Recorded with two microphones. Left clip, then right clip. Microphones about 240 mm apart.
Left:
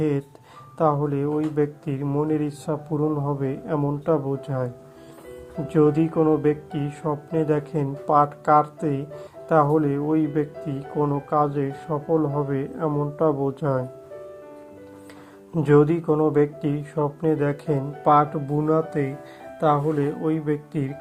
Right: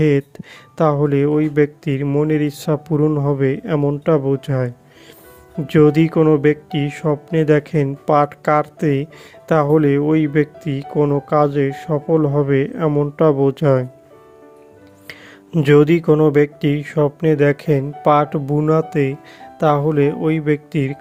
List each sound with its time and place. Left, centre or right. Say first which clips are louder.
0.0 s speech: right 8 dB; right
5.7 s speech: right 6 dB; right
15.5 s speech: right 6 dB; right